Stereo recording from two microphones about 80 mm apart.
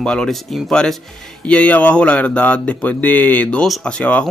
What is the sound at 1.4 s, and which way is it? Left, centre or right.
Speech, centre.